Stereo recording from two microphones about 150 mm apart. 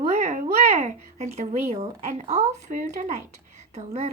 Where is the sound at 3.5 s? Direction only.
45° right (ahead or behind).